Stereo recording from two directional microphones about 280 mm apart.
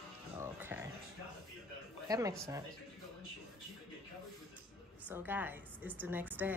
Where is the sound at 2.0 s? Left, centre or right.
Centre.